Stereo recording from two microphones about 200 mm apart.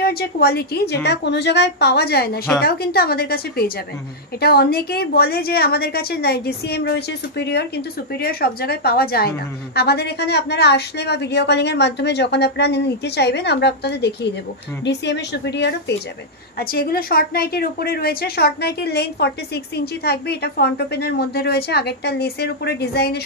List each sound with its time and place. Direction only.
0.0 s a woman's voice: 50° left (ahead or behind)
16.5 s a woman's voice: 50° left (ahead or behind)